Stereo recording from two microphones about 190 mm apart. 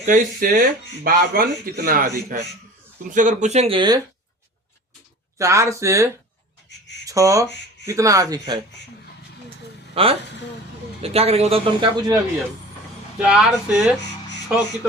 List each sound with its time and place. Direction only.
0.0 s speech: 45° right (ahead or behind); by 4.0 s 25° right (ahead or behind)
5.4 s speech: 15° right (ahead or behind)
9.9 s speech: 30° right (ahead or behind)
13.1 s speech: 5° right (ahead or behind)